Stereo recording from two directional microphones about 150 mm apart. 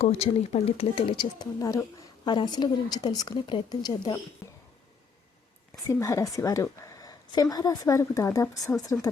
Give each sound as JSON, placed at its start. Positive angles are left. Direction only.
{"t": 0.0, "sound": "a woman's voice", "side_deg": 40}
{"t": 5.9, "sound": "a woman's voice", "side_deg": 20}